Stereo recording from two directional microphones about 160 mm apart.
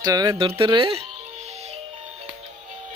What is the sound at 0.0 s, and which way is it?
Speech, 20° right (ahead or behind).